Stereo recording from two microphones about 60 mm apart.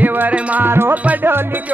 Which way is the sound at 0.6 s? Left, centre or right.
Right.